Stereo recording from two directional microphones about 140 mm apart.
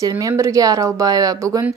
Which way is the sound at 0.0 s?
25° right (ahead or behind).